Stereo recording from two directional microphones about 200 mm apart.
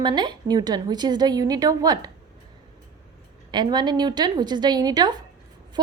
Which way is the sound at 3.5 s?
20° right (ahead or behind).